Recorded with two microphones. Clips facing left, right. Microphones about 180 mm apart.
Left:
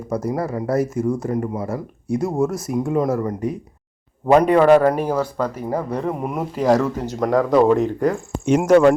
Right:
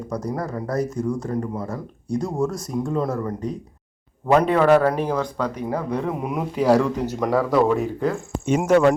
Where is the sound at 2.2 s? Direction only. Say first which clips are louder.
Left 4 dB; 25° left (ahead or behind).